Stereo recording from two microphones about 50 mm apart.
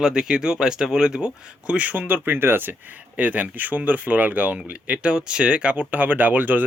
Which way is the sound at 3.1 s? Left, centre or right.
Right.